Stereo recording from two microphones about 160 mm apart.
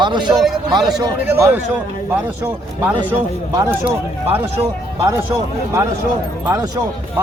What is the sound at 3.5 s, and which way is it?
Speech, 20° right (ahead or behind).